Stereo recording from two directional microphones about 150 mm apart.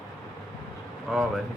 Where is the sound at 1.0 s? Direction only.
Centre (ahead or behind).